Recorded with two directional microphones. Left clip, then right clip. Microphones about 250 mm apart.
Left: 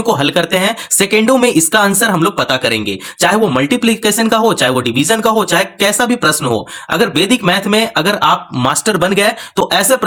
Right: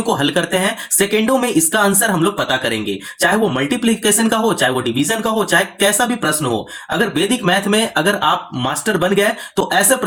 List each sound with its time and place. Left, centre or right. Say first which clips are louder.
0.0 s speech: left 4 dB; left